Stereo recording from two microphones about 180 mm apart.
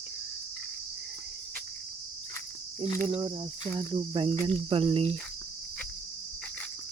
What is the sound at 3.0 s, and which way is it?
Cricket, 30° right (ahead or behind).